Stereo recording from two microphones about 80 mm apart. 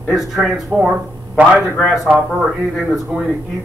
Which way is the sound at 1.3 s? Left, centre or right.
Right.